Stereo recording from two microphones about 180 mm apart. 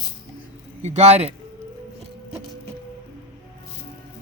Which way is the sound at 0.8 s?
40° right (ahead or behind).